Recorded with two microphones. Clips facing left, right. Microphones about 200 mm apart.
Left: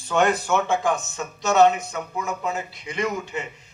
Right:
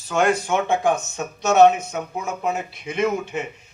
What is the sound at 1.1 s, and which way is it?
A man's voice, 60° right (ahead or behind).